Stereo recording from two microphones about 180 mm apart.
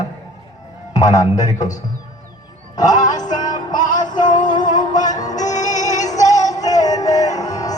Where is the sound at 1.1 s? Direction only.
20° left (ahead or behind).